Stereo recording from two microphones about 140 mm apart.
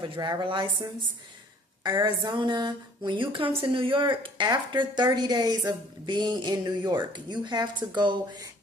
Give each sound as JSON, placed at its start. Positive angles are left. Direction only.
{"t": 0.0, "sound": "speech", "side_deg": -30}
{"t": 1.8, "sound": "speech", "side_deg": -30}